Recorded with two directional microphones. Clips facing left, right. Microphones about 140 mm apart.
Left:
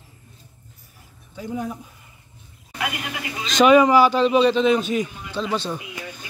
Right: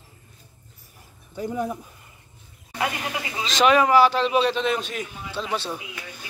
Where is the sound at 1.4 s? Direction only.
50° right (ahead or behind).